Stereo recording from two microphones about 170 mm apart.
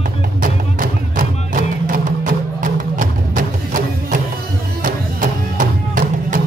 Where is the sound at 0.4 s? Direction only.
55° right (ahead or behind).